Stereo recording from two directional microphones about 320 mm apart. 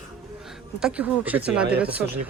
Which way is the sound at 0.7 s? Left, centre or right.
Centre.